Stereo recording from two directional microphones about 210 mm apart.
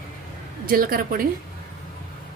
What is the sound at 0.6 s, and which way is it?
Speech, 45° right (ahead or behind).